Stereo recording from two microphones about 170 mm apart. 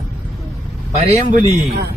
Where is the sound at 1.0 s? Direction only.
45° right (ahead or behind).